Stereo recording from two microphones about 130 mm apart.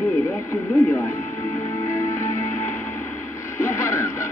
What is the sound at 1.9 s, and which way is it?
Music, 25° left (ahead or behind).